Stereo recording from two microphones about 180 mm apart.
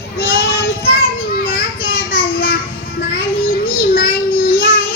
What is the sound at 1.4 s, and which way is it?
Children playing, 55° left (ahead or behind).